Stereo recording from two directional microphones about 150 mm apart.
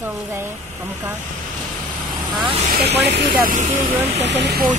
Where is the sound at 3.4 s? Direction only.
60° right (ahead or behind).